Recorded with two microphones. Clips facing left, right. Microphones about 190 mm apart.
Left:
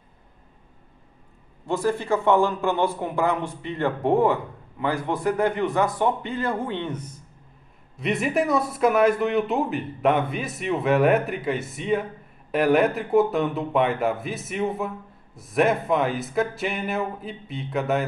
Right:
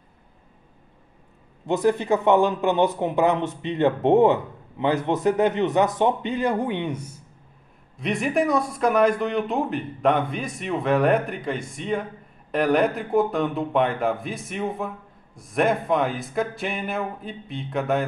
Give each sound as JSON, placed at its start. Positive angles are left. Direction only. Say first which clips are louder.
{"t": 1.7, "sound": "speech", "louder": "right 3 dB", "side_deg": -20}
{"t": 8.0, "sound": "speech", "louder": "even", "side_deg": 0}